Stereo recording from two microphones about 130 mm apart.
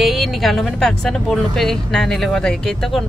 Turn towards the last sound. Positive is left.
turn(degrees=0)  # may be behind; listen again after turning